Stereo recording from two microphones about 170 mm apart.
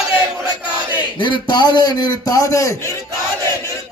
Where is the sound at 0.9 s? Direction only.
25° left (ahead or behind).